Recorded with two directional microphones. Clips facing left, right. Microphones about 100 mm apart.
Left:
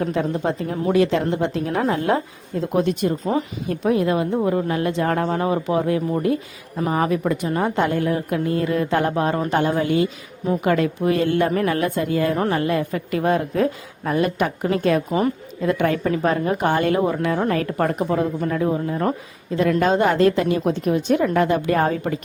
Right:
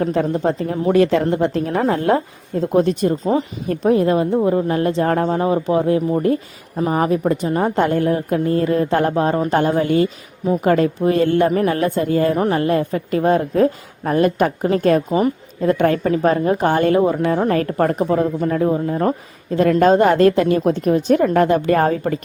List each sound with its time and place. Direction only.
0.0 s a woman's voice: 35° right (ahead or behind)
0.9 s a woman's voice: 50° right (ahead or behind); by 19.1 s 30° right (ahead or behind)
19.5 s a woman's voice: 50° right (ahead or behind)